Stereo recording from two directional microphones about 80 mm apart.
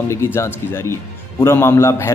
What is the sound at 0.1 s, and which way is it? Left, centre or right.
Speech, left.